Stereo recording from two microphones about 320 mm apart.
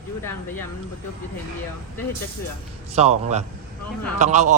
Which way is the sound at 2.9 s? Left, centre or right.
Centre.